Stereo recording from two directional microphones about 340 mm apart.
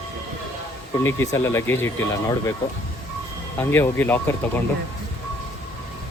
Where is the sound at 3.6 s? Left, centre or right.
Centre.